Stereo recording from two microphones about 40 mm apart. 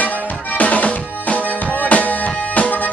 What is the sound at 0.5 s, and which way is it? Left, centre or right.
Music, left.